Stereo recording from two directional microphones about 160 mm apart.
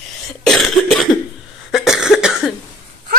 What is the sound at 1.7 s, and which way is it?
Cough, centre (ahead or behind).